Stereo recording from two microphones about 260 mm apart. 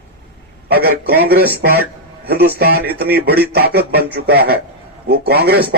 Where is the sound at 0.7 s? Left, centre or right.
Right.